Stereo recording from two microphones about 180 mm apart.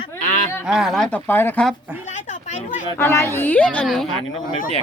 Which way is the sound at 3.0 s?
15° left (ahead or behind).